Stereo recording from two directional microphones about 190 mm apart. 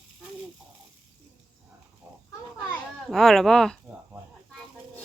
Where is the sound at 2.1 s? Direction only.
15° right (ahead or behind).